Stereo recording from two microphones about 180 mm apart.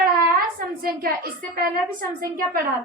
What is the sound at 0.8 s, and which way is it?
A woman's voice, 55° right (ahead or behind).